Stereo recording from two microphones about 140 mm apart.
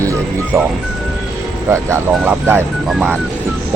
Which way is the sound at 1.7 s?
20° right (ahead or behind).